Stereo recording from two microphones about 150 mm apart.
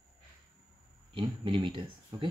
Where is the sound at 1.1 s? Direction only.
35° right (ahead or behind).